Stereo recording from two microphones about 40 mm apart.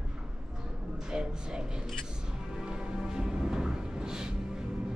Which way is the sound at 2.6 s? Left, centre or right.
Centre.